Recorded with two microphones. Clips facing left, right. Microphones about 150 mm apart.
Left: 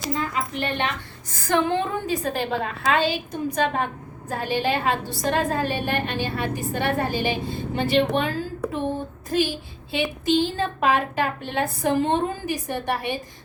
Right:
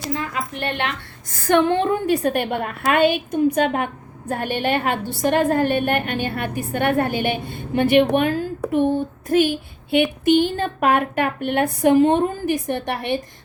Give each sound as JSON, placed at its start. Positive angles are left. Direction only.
{"t": 0.6, "sound": "a woman's voice", "side_deg": -65}